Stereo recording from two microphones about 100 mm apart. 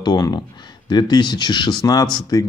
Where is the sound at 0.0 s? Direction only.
45° left (ahead or behind).